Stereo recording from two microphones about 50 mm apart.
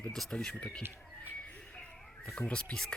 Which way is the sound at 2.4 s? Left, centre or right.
Left.